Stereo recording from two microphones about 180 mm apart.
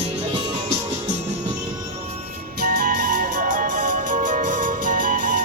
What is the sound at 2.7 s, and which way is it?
Music, 50° right (ahead or behind).